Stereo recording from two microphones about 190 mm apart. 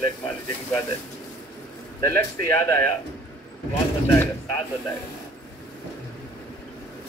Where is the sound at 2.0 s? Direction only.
15° left (ahead or behind).